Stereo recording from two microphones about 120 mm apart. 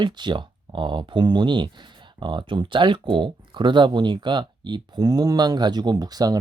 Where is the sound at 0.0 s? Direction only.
40° right (ahead or behind).